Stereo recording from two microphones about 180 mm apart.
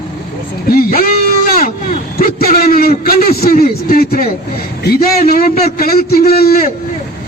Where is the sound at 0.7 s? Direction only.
55° left (ahead or behind).